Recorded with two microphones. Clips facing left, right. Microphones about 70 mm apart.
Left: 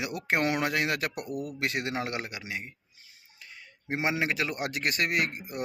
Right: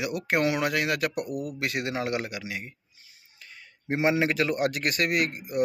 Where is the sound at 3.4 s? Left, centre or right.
Centre.